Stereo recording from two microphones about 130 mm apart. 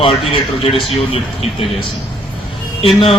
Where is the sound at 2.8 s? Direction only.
45° left (ahead or behind).